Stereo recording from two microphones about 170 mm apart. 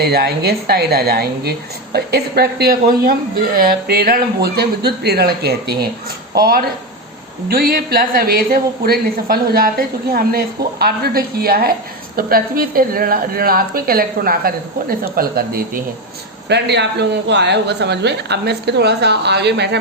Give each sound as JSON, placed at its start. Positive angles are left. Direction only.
{"t": 0.0, "sound": "a woman's voice", "side_deg": -70}
{"t": 16.5, "sound": "speech", "side_deg": -85}